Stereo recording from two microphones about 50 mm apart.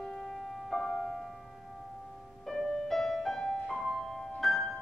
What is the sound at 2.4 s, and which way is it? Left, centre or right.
Music, centre.